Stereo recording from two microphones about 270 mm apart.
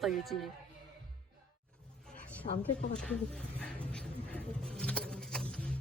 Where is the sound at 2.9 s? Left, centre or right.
Centre.